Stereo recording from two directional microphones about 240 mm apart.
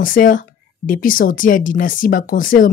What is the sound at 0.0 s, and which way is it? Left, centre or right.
Speech, left.